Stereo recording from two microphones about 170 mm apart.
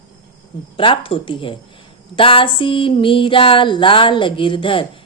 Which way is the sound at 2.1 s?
30° left (ahead or behind).